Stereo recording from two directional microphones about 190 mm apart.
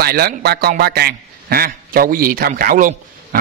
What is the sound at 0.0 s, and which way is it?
Speech, 55° right (ahead or behind).